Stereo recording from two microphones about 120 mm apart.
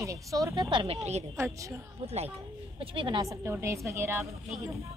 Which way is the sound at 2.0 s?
60° right (ahead or behind).